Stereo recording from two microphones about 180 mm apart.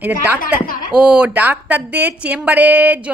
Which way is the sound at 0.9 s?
5° right (ahead or behind).